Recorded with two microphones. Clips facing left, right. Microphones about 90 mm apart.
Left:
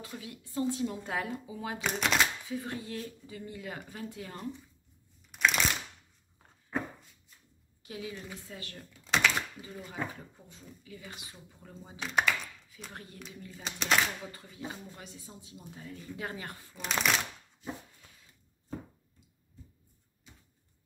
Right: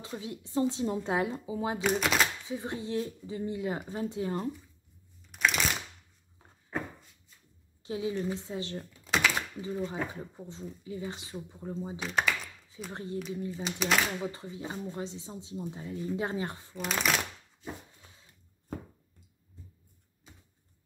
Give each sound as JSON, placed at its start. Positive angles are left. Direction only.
{"t": 0.0, "sound": "speech", "side_deg": -25}
{"t": 1.8, "sound": "speech", "side_deg": 0}
{"t": 2.4, "sound": "speech", "side_deg": -20}
{"t": 5.3, "sound": "crushing", "side_deg": 0}
{"t": 7.8, "sound": "speech", "side_deg": -25}
{"t": 9.0, "sound": "a sound", "side_deg": -5}
{"t": 9.6, "sound": "speech", "side_deg": -25}
{"t": 12.0, "sound": "speech", "side_deg": 0}
{"t": 12.9, "sound": "speech", "side_deg": -25}
{"t": 13.6, "sound": "speech", "side_deg": -5}
{"t": 14.2, "sound": "speech", "side_deg": -25}
{"t": 16.7, "sound": "speech", "side_deg": 0}